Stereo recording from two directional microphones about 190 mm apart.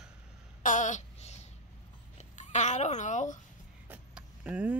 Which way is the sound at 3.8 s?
5° right (ahead or behind).